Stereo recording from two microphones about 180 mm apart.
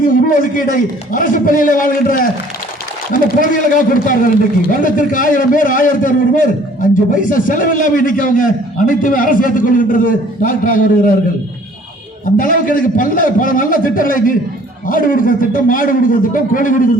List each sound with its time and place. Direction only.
0.0 s a man's voice: 50° left (ahead or behind)
12.4 s a man's voice: 50° left (ahead or behind)